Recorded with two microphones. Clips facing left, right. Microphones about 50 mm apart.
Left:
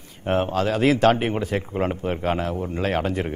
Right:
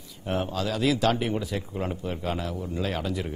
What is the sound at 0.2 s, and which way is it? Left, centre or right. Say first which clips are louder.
A man's voice: left 7 dB; left.